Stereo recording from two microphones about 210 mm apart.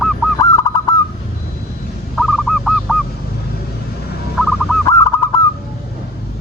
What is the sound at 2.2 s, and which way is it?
Goose, centre (ahead or behind).